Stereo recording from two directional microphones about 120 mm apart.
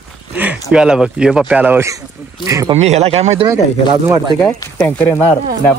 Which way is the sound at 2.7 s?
65° right (ahead or behind).